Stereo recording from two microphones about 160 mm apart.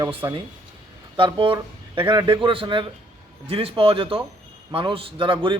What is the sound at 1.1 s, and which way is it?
A man's voice, 30° right (ahead or behind).